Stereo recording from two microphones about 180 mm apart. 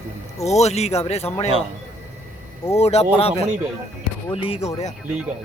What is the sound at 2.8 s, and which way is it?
Speech, 35° left (ahead or behind).